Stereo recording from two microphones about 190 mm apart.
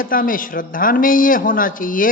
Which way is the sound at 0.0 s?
45° left (ahead or behind).